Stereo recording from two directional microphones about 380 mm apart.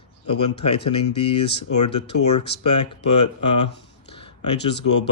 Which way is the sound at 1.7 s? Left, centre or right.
Left.